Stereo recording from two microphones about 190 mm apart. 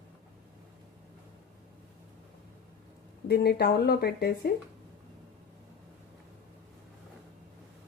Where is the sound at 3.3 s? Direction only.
55° left (ahead or behind).